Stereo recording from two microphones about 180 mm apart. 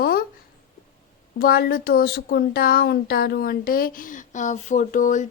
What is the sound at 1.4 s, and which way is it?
Speech, 55° left (ahead or behind).